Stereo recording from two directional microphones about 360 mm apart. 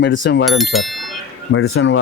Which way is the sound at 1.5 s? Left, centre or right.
Left.